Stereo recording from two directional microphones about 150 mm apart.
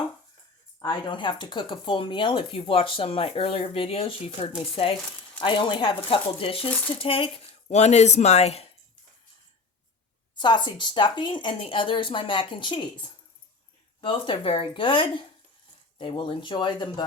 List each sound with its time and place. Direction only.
0.8 s speech: 30° left (ahead or behind)
10.3 s speech: 30° left (ahead or behind)